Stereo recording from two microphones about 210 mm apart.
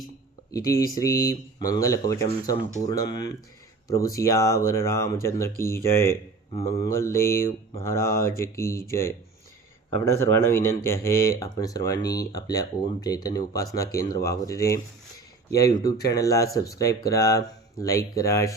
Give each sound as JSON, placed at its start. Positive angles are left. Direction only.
{"t": 0.5, "sound": "speech", "side_deg": 15}